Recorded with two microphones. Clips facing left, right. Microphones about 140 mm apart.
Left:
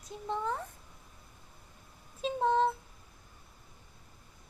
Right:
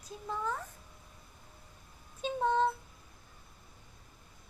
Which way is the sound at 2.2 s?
30° left (ahead or behind).